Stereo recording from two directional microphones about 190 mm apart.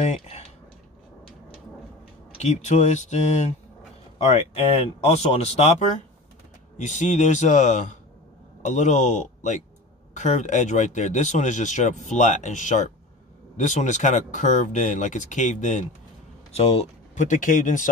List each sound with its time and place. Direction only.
0.0 s speech: 35° left (ahead or behind)
2.3 s speech: 35° left (ahead or behind)